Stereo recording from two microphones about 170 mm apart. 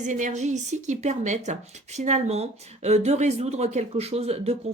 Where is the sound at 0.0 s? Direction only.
45° right (ahead or behind).